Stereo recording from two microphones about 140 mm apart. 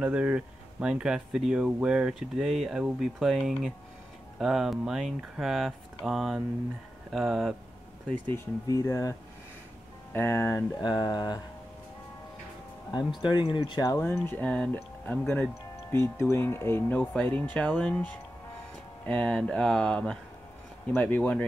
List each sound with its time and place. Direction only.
0.0 s speech: 10° right (ahead or behind)
8.6 s speech: 25° left (ahead or behind)
10.1 s speech: 20° left (ahead or behind)
10.8 s speech: 35° left (ahead or behind)
13.2 s speech: 35° left (ahead or behind)
13.9 s speech: 20° left (ahead or behind)